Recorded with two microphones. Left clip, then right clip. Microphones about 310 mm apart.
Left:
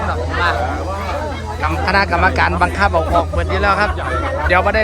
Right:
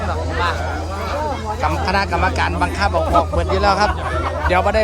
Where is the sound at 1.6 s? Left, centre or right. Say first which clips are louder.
Left 4 dB; centre.